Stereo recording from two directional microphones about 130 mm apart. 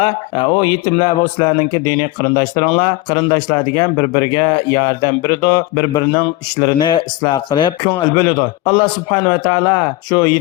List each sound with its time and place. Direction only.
0.0 s speech: 40° left (ahead or behind)